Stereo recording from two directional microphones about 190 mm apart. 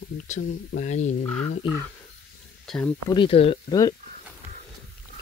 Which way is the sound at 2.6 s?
5° left (ahead or behind).